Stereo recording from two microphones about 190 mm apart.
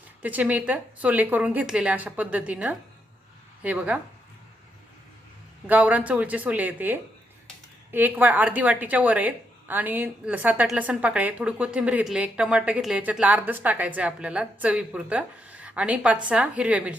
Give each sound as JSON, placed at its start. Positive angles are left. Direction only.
{"t": 0.2, "sound": "a woman's voice", "side_deg": -10}
{"t": 5.6, "sound": "a woman's voice", "side_deg": -10}